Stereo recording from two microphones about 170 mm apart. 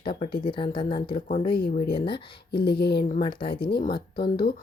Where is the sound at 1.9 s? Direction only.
30° left (ahead or behind).